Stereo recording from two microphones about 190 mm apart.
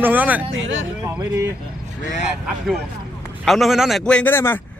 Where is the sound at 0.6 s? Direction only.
85° right.